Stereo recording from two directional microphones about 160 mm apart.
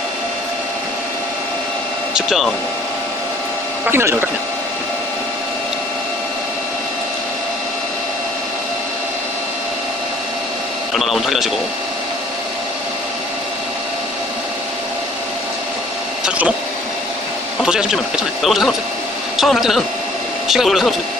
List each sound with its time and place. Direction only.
2.1 s speech: centre (ahead or behind)
3.8 s speech: 15° right (ahead or behind)
11.0 s a man's voice: centre (ahead or behind)
16.3 s printer: 5° right (ahead or behind)
17.6 s speech: 5° right (ahead or behind)